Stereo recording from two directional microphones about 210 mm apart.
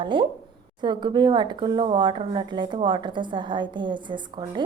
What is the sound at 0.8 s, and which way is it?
Speech, 20° right (ahead or behind).